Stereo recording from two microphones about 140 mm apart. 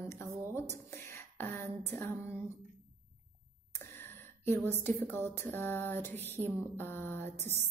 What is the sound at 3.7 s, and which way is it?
Speech, 15° left (ahead or behind).